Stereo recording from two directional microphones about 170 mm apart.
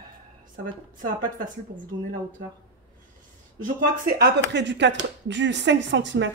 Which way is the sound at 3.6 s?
60° right (ahead or behind).